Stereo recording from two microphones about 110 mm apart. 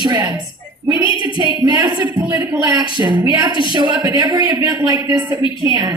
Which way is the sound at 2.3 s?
40° right (ahead or behind).